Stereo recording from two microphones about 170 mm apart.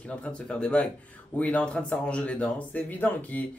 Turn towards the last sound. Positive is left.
turn(degrees=10)  # may be behind; listen again after turning